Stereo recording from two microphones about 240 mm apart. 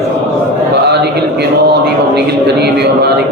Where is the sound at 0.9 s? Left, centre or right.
Right.